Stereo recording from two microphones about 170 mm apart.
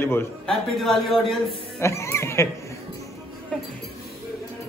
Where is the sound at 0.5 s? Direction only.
Centre (ahead or behind).